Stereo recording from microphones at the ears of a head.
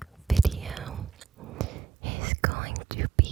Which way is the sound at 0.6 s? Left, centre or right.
Right.